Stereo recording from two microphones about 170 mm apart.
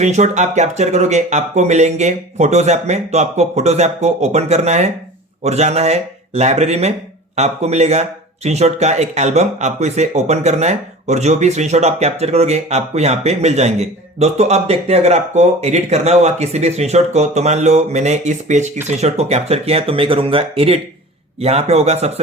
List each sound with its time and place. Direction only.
0.0 s speech: 45° right (ahead or behind)